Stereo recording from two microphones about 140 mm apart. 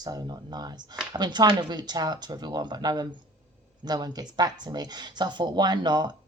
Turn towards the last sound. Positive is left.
turn(degrees=-30)  # may be behind; listen again after turning